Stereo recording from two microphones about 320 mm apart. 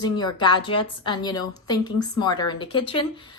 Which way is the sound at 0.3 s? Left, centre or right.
Centre.